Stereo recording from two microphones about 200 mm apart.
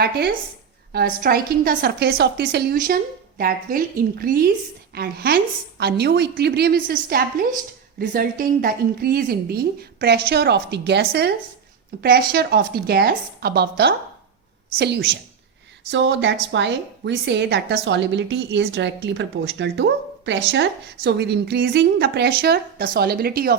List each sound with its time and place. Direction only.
0.9 s a woman's voice: 50° right (ahead or behind)